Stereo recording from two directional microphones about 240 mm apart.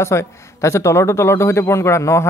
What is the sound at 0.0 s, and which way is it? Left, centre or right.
Speech, centre.